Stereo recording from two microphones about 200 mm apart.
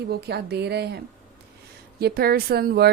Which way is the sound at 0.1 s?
55° right (ahead or behind).